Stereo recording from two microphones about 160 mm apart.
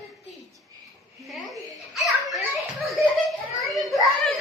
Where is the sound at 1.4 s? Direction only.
Centre (ahead or behind).